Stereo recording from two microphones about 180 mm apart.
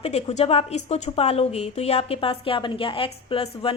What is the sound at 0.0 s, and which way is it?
Speech, 35° left (ahead or behind).